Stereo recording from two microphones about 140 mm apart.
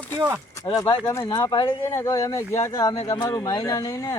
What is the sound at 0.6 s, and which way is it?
Speech, 20° left (ahead or behind).